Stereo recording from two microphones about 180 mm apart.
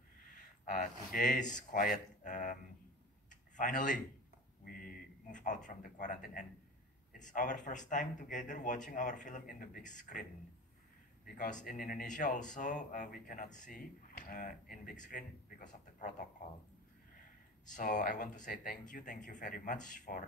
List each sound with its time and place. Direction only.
0.7 s speech: 45° left (ahead or behind)
3.3 s a sound: 45° left (ahead or behind)
5.8 s a man's voice: 45° left (ahead or behind)
11.2 s speech: 45° left (ahead or behind)
17.6 s speech: 45° left (ahead or behind)